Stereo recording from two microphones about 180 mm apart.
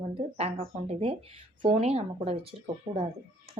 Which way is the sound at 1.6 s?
30° right (ahead or behind).